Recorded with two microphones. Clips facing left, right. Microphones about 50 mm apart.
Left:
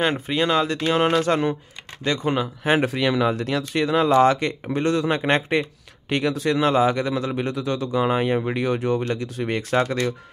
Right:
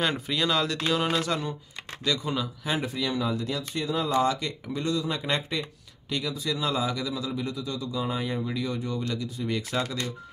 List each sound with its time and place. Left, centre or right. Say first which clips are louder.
0.3 s speech: left 6 dB; left
1.0 s speech: left 8 dB; left
2.8 s speech: left 8 dB; left